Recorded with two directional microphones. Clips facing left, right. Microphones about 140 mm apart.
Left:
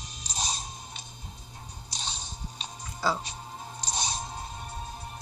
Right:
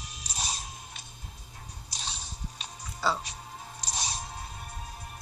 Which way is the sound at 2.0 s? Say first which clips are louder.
Left 1 dB; 25° left (ahead or behind).